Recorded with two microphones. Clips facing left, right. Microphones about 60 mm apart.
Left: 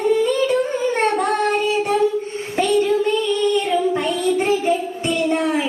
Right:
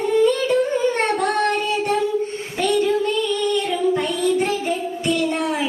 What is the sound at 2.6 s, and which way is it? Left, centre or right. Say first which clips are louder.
Child singing: left 2 dB; left.